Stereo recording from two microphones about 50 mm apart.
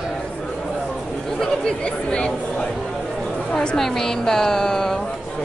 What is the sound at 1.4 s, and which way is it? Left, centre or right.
Speech, centre.